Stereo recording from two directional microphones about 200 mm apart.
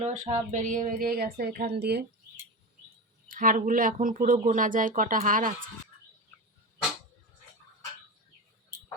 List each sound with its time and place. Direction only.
0.0 s speech: 35° right (ahead or behind); by 2.0 s 55° right (ahead or behind)
3.2 s speech: 45° right (ahead or behind)